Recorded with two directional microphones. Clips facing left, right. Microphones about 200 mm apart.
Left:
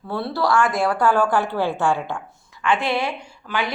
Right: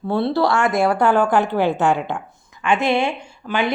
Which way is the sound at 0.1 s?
25° right (ahead or behind).